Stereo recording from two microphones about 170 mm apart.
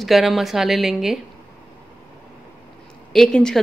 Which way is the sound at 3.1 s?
5° left (ahead or behind).